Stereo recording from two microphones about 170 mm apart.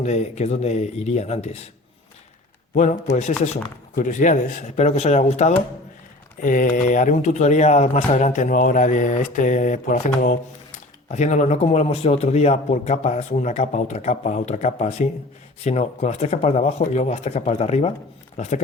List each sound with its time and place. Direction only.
0.0 s speech: 40° left (ahead or behind)
2.7 s speech: 45° left (ahead or behind)